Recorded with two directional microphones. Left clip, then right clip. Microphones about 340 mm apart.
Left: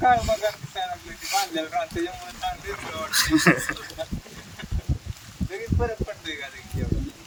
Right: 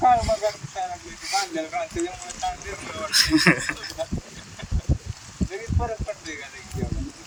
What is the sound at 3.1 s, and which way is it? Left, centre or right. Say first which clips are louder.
Speech: right 1 dB; centre.